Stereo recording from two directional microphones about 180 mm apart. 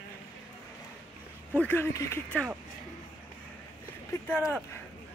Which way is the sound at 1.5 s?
10° left (ahead or behind).